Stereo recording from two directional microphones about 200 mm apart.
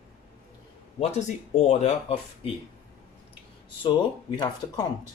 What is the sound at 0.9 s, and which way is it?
Speech, 30° left (ahead or behind).